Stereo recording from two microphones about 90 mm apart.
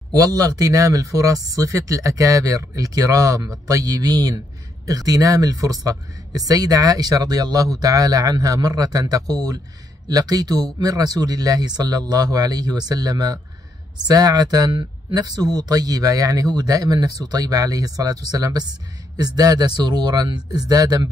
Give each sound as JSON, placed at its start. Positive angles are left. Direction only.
{"t": 0.1, "sound": "speech", "side_deg": -40}